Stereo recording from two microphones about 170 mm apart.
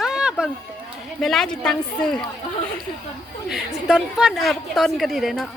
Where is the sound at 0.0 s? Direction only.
5° right (ahead or behind).